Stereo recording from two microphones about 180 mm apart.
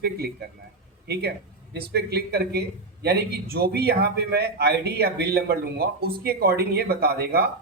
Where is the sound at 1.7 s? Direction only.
65° right (ahead or behind).